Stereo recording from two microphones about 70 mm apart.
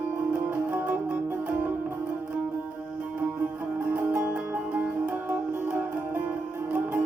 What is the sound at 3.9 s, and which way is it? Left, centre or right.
Music, right.